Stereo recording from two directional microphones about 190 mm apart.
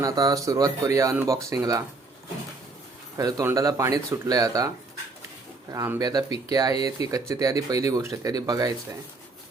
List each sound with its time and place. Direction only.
0.0 s speech: 20° right (ahead or behind)
3.2 s speech: 20° right (ahead or behind)
5.7 s speech: 15° right (ahead or behind)